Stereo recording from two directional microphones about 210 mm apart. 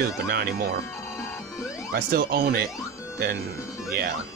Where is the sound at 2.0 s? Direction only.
45° right (ahead or behind).